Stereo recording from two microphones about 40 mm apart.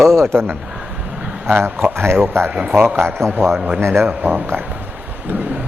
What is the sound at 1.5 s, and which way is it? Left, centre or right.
Speech, right.